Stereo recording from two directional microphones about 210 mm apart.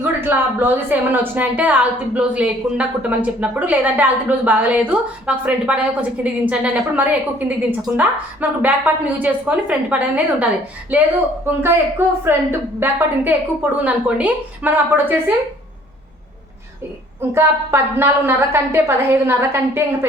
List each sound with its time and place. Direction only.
0.0 s a woman's voice: 10° right (ahead or behind)
17.2 s a woman's voice: 10° right (ahead or behind)